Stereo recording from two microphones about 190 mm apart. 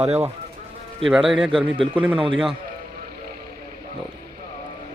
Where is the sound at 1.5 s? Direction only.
25° right (ahead or behind).